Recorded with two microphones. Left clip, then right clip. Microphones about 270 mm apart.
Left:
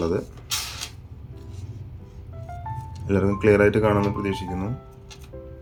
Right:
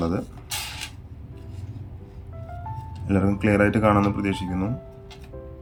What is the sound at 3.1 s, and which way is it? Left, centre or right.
Speech, centre.